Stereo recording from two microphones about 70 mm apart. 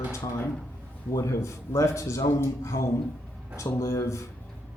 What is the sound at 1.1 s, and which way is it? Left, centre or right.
Speech, left.